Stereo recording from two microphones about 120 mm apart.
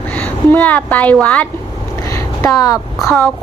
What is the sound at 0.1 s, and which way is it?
Speech, 10° left (ahead or behind).